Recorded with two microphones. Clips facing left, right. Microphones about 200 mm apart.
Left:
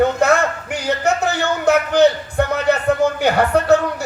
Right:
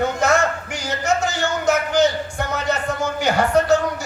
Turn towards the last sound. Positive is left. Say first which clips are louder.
# left 2 dB
turn(degrees=60)  # may be behind; listen again after turning